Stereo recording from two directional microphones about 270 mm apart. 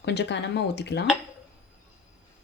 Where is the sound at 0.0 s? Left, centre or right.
Left.